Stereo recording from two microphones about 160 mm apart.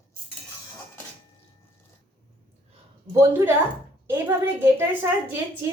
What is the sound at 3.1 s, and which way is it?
A woman's voice, 15° right (ahead or behind).